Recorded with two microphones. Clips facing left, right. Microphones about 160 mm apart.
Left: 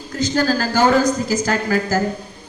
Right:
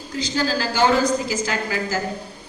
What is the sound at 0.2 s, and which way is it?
A woman's voice, 45° left (ahead or behind).